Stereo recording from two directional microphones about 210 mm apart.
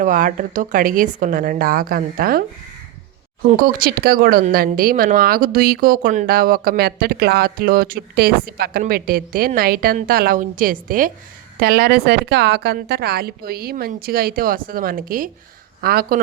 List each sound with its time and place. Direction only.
0.0 s speech: 40° right (ahead or behind)
3.4 s speech: 45° right (ahead or behind)